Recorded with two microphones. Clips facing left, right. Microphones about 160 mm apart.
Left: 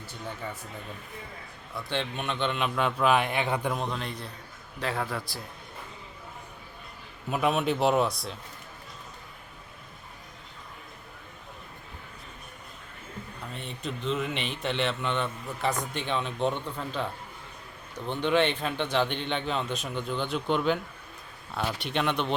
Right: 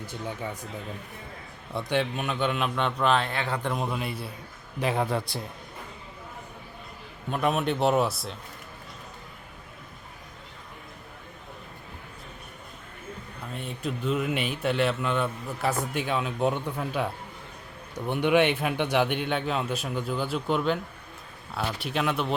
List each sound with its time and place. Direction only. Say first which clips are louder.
0.0 s a man's voice: right 4 dB; 15° right (ahead or behind)
1.9 s speech: right 4 dB; 5° right (ahead or behind)
3.2 s speech: left 2 dB; 15° left (ahead or behind)
3.7 s a man's voice: right 2 dB; 5° right (ahead or behind)
4.8 s a man's voice: right 5 dB; 20° right (ahead or behind)
7.3 s speech: even; 5° left (ahead or behind)
13.5 s a man's voice: right 4 dB; 5° right (ahead or behind)